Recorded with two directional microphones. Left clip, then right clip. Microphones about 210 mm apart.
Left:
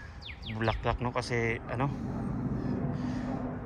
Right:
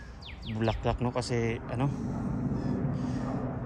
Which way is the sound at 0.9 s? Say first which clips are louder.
Right 1 dB; 15° right (ahead or behind).